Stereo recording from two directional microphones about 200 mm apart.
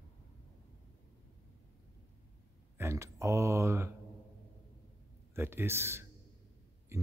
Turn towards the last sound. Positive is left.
turn(degrees=-15)  # may be behind; listen again after turning